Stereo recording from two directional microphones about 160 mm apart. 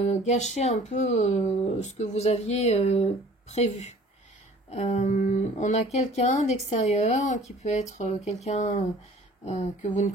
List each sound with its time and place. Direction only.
0.0 s speech: 45° left (ahead or behind)